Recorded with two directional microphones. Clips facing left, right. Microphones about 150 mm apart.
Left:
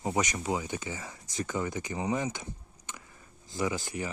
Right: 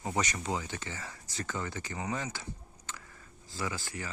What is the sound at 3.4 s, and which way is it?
Speech, 20° left (ahead or behind).